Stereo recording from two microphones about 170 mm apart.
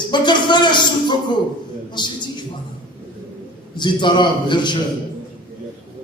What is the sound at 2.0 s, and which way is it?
Speech, 25° left (ahead or behind).